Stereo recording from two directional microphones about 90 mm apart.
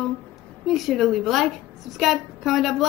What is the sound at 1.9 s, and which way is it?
Speech, centre (ahead or behind).